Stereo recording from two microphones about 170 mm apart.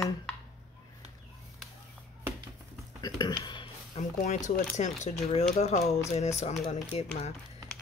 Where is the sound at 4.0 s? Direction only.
40° left (ahead or behind).